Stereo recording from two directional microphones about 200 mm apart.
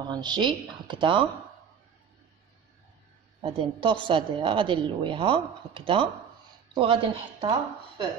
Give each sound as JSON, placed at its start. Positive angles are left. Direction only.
{"t": 0.0, "sound": "a woman's voice", "side_deg": -20}
{"t": 3.3, "sound": "a woman's voice", "side_deg": -25}